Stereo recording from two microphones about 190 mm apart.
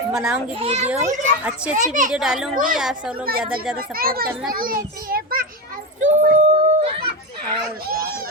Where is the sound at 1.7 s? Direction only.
40° right (ahead or behind).